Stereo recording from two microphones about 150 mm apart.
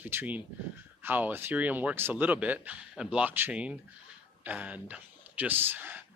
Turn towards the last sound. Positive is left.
turn(degrees=-10)  # may be behind; listen again after turning